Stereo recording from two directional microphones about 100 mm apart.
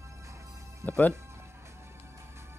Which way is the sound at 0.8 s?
15° left (ahead or behind).